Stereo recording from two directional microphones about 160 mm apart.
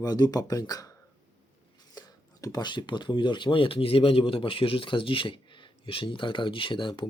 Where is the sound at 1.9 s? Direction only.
25° left (ahead or behind).